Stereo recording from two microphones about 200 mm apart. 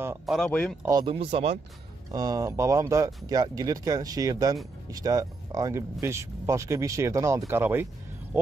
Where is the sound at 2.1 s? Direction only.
20° right (ahead or behind).